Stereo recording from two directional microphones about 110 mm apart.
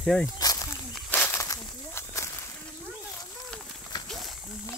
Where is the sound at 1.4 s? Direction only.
30° left (ahead or behind).